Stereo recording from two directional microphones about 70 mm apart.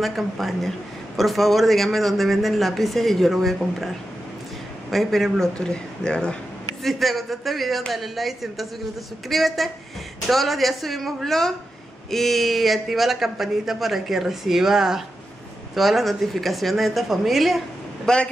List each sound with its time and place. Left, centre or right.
0.0 s a man's voice: centre
4.9 s speech: centre
6.8 s a man's voice: centre
18.0 s speech: centre